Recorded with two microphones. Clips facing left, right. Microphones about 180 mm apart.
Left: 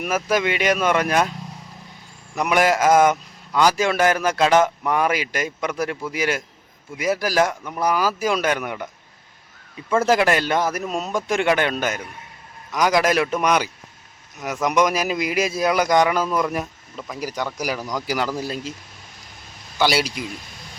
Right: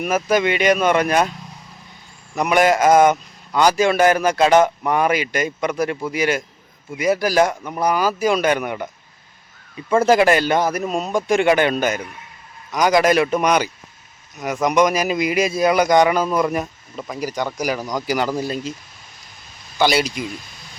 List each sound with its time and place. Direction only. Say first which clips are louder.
0.0 s a man's voice: right 3 dB; 5° left (ahead or behind)
2.3 s a man's voice: right 3 dB; centre (ahead or behind)
10.1 s a man's voice: right 4 dB; centre (ahead or behind)
17.7 s speech: right 3 dB; 15° right (ahead or behind)
18.0 s a man's voice: right 4 dB; centre (ahead or behind)
19.8 s a man's voice: right 2 dB; 5° left (ahead or behind)